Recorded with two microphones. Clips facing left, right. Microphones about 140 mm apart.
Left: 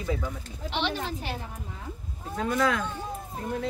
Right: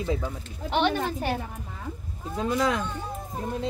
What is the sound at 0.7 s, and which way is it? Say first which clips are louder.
Speech: right 6 dB; 50° right (ahead or behind).